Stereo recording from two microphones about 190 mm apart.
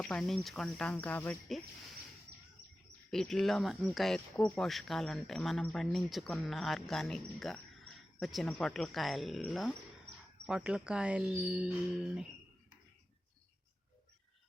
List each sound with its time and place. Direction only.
0.0 s speech: 5° left (ahead or behind)
3.1 s speech: 5° left (ahead or behind)